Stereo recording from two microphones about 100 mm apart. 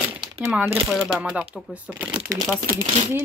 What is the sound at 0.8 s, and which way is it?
Speech, 5° right (ahead or behind).